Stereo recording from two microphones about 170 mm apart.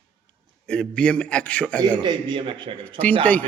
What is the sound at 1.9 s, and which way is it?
Speech, 30° right (ahead or behind).